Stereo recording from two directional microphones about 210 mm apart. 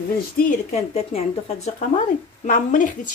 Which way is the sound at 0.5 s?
35° left (ahead or behind).